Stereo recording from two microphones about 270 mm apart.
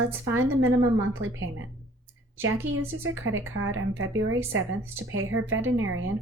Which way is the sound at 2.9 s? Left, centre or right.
Right.